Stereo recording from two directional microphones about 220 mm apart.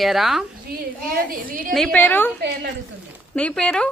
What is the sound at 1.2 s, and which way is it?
Speech, 40° right (ahead or behind).